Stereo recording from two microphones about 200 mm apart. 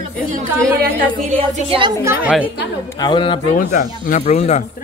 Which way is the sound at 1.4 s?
25° right (ahead or behind).